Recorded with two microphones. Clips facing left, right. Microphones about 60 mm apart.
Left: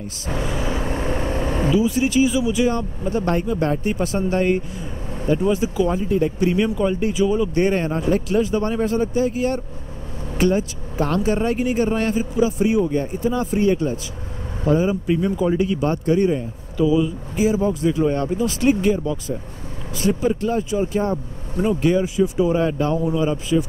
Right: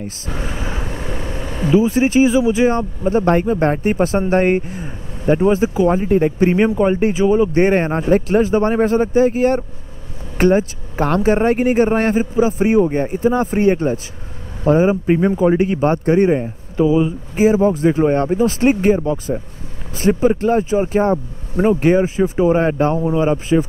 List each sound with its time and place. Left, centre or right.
0.3 s vehicle: right
0.8 s vehicle: left
1.7 s speech: right